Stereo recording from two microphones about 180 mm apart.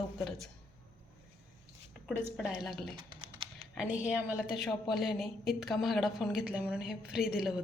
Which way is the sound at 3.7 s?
5° right (ahead or behind).